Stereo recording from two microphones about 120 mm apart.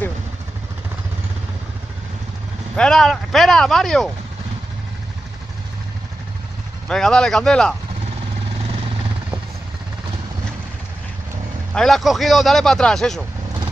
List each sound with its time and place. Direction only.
2.7 s speech: 5° left (ahead or behind)
6.9 s speech: 5° left (ahead or behind)
11.7 s speech: 5° left (ahead or behind)